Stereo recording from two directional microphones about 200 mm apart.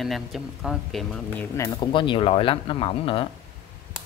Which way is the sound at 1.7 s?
25° left (ahead or behind).